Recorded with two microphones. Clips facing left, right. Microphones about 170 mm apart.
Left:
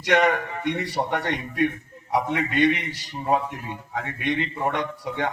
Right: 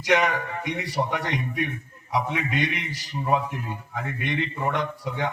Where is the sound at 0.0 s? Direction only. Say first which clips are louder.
Left 2 dB; 65° left (ahead or behind).